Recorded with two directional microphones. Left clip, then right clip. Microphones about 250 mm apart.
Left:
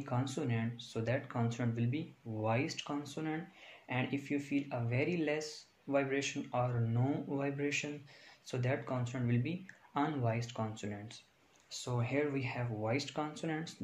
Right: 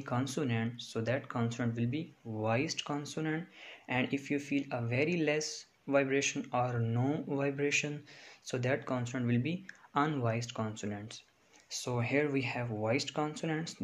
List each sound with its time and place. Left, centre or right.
0.0 s speech: right